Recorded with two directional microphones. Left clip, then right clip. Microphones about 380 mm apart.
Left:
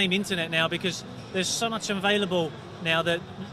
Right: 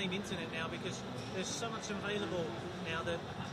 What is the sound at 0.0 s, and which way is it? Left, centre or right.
A man's voice, left.